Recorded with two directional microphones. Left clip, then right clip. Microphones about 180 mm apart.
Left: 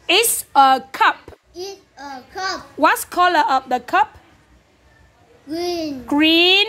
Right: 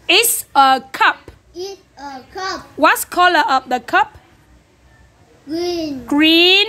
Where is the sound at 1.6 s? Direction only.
20° left (ahead or behind).